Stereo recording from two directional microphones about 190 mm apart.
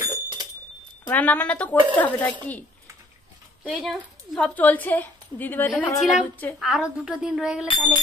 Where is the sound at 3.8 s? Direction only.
5° left (ahead or behind).